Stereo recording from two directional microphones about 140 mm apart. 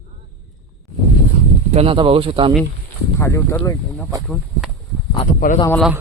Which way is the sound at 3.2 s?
20° left (ahead or behind).